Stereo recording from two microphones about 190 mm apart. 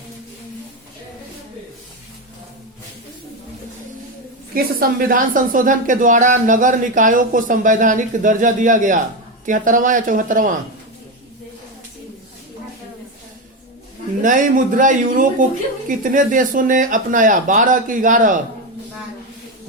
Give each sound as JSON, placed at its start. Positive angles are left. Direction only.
{"t": 4.5, "sound": "speech", "side_deg": -50}
{"t": 14.2, "sound": "speech", "side_deg": -45}